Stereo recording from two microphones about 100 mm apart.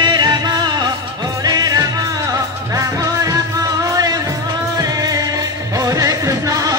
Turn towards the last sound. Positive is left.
turn(degrees=-35)  # may be behind; listen again after turning